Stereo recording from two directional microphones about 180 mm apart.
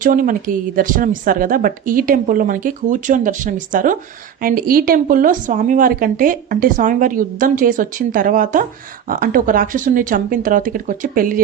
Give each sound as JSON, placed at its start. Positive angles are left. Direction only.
{"t": 0.0, "sound": "speech", "side_deg": -50}